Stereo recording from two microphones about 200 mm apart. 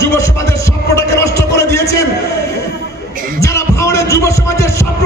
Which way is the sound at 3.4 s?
15° left (ahead or behind).